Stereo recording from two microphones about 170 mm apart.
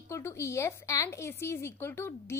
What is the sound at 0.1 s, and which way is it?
A woman's voice, 15° left (ahead or behind).